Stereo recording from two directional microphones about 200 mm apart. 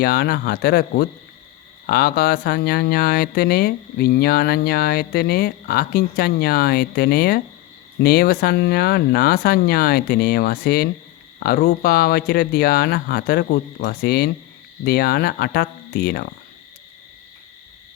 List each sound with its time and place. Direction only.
0.0 s speech: 50° left (ahead or behind)